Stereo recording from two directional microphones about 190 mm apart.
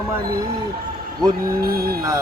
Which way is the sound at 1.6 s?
55° right (ahead or behind).